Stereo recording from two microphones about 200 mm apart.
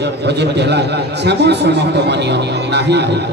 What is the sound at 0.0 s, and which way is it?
Music, 60° right (ahead or behind).